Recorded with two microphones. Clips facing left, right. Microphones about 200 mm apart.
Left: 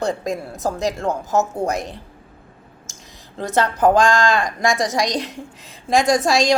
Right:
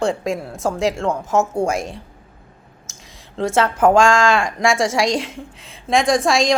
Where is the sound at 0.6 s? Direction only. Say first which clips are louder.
Right 2 dB; centre (ahead or behind).